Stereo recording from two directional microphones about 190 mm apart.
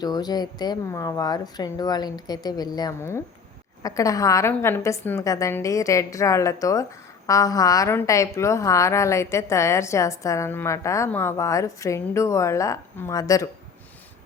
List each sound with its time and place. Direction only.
0.0 s a woman's voice: 20° left (ahead or behind)